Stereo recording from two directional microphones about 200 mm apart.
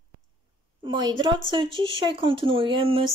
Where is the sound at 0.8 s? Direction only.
20° right (ahead or behind).